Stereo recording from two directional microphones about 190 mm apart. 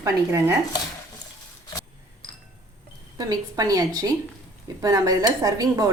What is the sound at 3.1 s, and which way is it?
A woman's voice, 20° right (ahead or behind).